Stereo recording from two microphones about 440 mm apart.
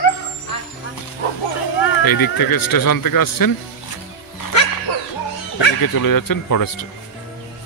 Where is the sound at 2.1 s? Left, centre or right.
Left.